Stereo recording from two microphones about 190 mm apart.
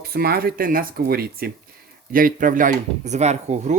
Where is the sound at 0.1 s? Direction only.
55° right (ahead or behind).